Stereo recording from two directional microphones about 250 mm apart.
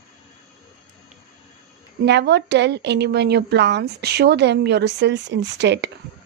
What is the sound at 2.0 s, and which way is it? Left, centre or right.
A woman's voice, right.